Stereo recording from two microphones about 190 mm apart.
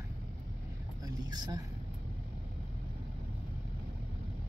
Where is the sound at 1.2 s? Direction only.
20° right (ahead or behind).